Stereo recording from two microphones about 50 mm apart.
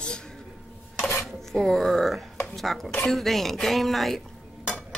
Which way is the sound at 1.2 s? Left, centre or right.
Centre.